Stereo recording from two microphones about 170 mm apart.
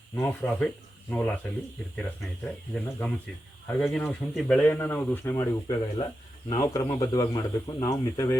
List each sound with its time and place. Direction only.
0.2 s speech: 10° left (ahead or behind)